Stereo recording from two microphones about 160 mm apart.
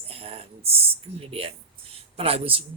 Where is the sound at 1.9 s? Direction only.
40° right (ahead or behind).